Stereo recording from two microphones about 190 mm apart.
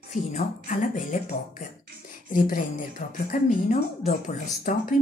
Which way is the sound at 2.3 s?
45° left (ahead or behind).